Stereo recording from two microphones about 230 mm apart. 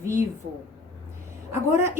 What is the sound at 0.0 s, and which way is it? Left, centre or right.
Speech, centre.